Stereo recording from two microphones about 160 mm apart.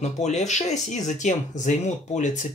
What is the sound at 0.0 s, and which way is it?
Speech, 45° left (ahead or behind).